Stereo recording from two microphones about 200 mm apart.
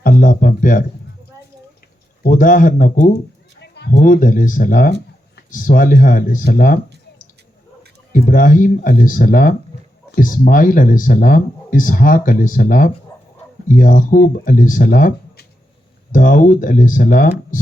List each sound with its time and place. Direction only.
0.0 s speech: 45° left (ahead or behind)
2.2 s speech: 40° left (ahead or behind)
3.6 s a sound: 60° left (ahead or behind)
3.9 s speech: 40° left (ahead or behind)
8.1 s speech: 40° left (ahead or behind)